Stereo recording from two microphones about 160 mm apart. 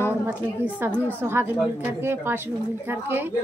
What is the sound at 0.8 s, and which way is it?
A woman's voice, 10° right (ahead or behind).